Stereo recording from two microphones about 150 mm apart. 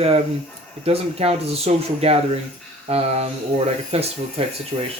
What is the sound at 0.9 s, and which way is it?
Speech, 40° right (ahead or behind).